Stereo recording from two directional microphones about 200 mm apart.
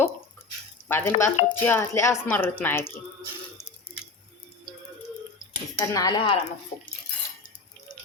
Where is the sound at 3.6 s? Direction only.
35° left (ahead or behind).